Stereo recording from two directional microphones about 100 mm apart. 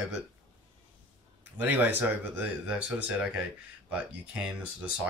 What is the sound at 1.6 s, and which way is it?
Speech, 15° right (ahead or behind).